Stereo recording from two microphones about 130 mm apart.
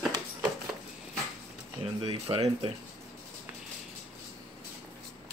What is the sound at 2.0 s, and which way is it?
Speech, 50° right (ahead or behind).